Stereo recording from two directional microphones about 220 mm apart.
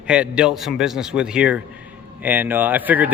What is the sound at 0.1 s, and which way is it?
A man's voice, 5° right (ahead or behind).